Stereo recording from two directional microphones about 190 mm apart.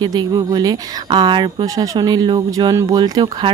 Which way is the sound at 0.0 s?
20° right (ahead or behind).